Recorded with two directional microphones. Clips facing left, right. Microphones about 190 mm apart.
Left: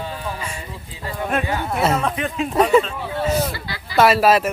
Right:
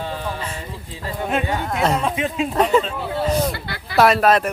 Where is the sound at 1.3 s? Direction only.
5° left (ahead or behind).